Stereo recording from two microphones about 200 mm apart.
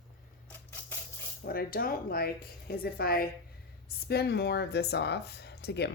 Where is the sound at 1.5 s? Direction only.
50° left (ahead or behind).